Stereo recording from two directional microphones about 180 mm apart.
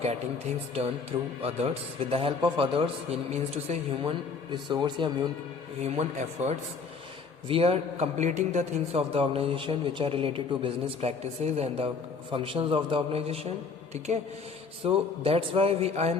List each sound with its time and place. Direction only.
1.4 s a man's voice: 35° right (ahead or behind)
4.5 s a man's voice: 25° right (ahead or behind)
5.8 s a man's voice: 40° right (ahead or behind)
14.8 s a man's voice: 30° right (ahead or behind)